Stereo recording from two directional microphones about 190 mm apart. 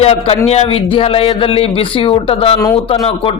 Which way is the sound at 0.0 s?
35° left (ahead or behind).